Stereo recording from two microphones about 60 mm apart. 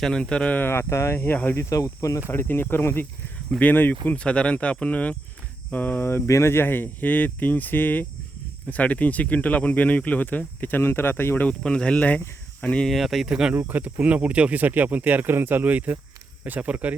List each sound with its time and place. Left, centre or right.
0.0 s speech: centre
0.5 s speech: left
1.5 s speech: left
2.3 s speech: left
4.2 s speech: centre; by 6.2 s left
6.2 s speech: left
11.6 s speech: centre
11.9 s speech: left
12.9 s speech: centre
13.2 s speech: centre
13.7 s speech: right